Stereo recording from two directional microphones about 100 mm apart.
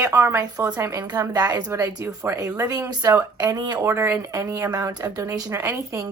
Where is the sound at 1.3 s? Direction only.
40° right (ahead or behind).